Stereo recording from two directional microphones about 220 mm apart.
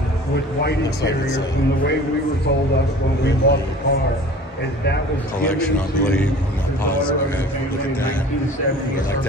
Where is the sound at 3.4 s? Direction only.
45° left (ahead or behind).